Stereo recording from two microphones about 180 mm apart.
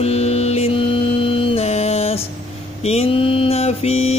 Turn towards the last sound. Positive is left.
turn(degrees=35)  # may be behind; listen again after turning